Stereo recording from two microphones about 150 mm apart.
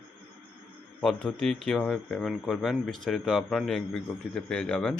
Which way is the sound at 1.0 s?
5° left (ahead or behind).